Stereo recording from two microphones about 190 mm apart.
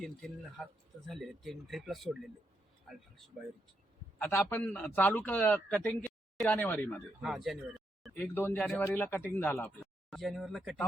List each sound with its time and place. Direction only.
0.0 s speech: centre (ahead or behind)
4.2 s speech: 10° left (ahead or behind)
7.2 s speech: centre (ahead or behind)
8.1 s speech: 10° left (ahead or behind)